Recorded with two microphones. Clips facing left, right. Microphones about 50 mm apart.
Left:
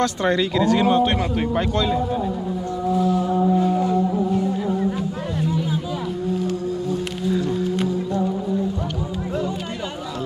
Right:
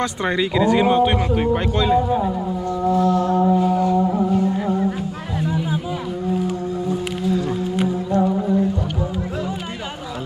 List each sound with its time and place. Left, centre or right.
0.0 s speech: centre
2.9 s music: centre
3.4 s music: right
5.5 s a sound: centre